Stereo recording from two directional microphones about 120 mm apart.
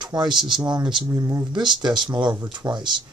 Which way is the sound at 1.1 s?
25° right (ahead or behind).